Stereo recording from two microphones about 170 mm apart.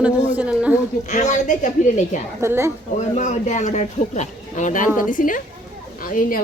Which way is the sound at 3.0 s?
45° left (ahead or behind).